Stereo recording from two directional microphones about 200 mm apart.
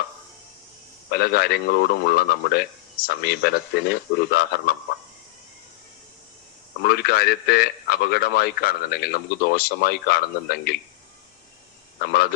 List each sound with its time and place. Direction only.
1.1 s a man's voice: 50° left (ahead or behind)
6.8 s a man's voice: 50° left (ahead or behind)